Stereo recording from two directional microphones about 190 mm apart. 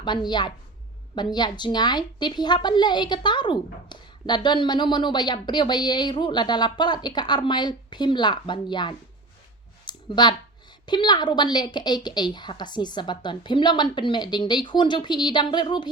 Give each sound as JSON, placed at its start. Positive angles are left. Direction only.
{"t": 0.0, "sound": "a woman's voice", "side_deg": 25}
{"t": 9.8, "sound": "clicking", "side_deg": 25}
{"t": 10.8, "sound": "a woman's voice", "side_deg": 25}